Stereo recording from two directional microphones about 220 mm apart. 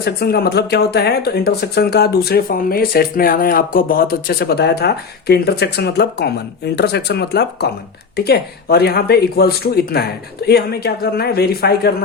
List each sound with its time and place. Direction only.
0.0 s speech: 45° left (ahead or behind)